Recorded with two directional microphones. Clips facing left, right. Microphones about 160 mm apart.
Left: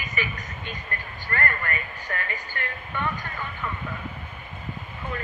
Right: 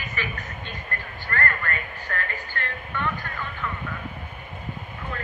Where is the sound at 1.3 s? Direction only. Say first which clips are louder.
Right 1 dB; 15° left (ahead or behind).